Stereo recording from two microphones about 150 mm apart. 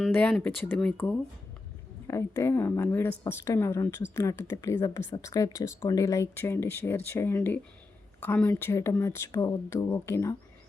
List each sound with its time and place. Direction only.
0.1 s a woman's voice: 10° left (ahead or behind)
2.0 s a woman's voice: 20° left (ahead or behind)